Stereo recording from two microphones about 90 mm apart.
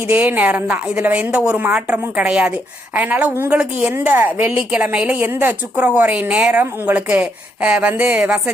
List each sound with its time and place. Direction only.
0.0 s a woman's voice: 20° right (ahead or behind)